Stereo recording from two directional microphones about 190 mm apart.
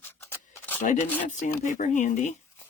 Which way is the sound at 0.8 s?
40° left (ahead or behind).